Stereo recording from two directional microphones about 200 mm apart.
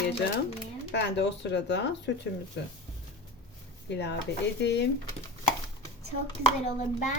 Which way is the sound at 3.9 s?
55° left (ahead or behind).